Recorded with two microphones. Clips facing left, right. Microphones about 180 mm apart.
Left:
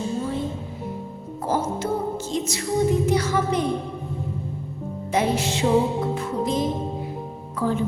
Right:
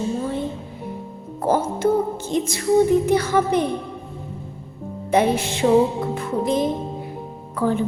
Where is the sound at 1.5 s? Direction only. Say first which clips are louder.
Right 5 dB; 55° right (ahead or behind).